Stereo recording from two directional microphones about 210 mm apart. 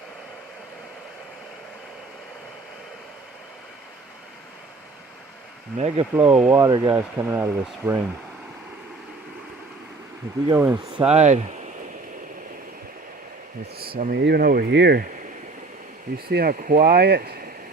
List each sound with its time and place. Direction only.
5.7 s speech: 30° right (ahead or behind)
6.1 s speech: 10° right (ahead or behind)
10.5 s speech: 10° right (ahead or behind)
11.1 s speech: 30° right (ahead or behind)
13.9 s speech: 45° right (ahead or behind)
16.1 s speech: 45° right (ahead or behind)